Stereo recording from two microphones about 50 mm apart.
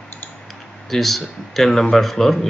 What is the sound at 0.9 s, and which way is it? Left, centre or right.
Speech, centre.